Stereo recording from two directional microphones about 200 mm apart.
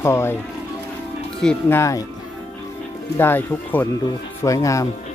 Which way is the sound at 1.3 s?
10° left (ahead or behind).